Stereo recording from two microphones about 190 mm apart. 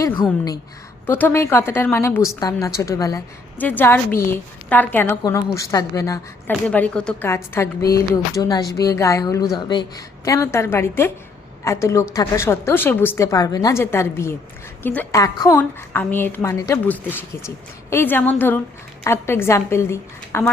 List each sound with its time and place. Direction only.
0.0 s a woman's voice: 25° left (ahead or behind)
1.0 s a woman's voice: 10° left (ahead or behind)
6.5 s a woman's voice: 5° left (ahead or behind)